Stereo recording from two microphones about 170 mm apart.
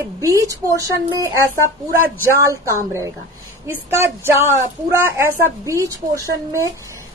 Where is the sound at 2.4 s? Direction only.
15° right (ahead or behind).